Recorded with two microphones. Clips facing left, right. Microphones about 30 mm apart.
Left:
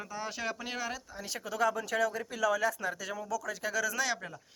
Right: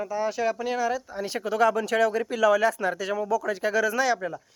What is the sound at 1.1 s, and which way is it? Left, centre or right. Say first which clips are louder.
Speech: right 10 dB; right.